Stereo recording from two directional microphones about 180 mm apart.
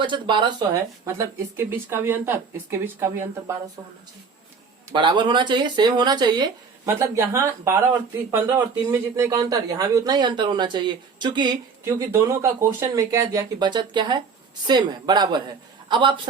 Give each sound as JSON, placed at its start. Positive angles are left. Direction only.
{"t": 0.0, "sound": "speech", "side_deg": -25}
{"t": 4.9, "sound": "speech", "side_deg": -25}